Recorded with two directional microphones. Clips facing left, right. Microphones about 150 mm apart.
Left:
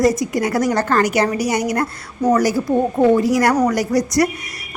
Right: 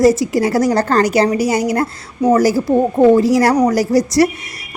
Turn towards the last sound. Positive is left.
turn(degrees=-30)  # may be behind; listen again after turning